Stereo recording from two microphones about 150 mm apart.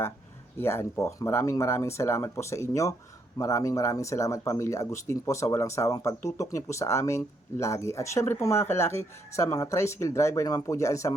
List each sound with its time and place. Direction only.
0.6 s speech: 15° left (ahead or behind)